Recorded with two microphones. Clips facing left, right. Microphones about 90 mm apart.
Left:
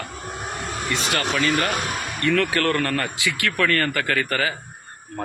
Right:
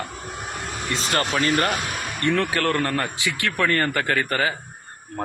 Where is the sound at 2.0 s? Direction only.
20° right (ahead or behind).